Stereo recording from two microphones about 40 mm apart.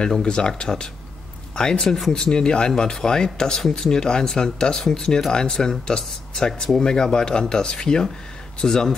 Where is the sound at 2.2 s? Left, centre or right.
Centre.